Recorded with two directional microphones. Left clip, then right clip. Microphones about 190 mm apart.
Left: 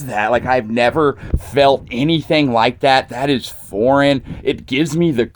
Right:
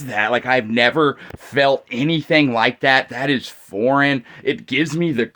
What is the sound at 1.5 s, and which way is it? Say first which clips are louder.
Speech: left 4 dB; 45° left (ahead or behind).